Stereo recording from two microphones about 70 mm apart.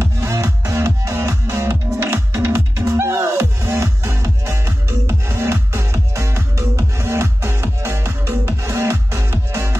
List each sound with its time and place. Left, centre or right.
0.0 s music: right